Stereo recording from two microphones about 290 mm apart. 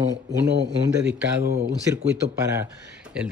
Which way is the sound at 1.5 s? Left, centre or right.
Right.